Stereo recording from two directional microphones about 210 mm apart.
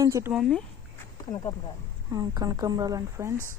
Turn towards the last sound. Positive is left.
turn(degrees=-15)  # may be behind; listen again after turning